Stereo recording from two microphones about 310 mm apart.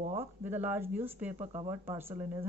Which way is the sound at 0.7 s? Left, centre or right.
Centre.